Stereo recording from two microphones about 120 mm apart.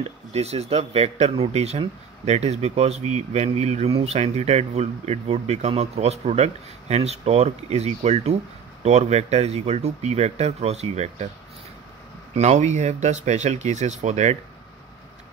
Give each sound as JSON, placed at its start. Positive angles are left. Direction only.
{"t": 0.0, "sound": "speech", "side_deg": -65}
{"t": 12.4, "sound": "speech", "side_deg": -70}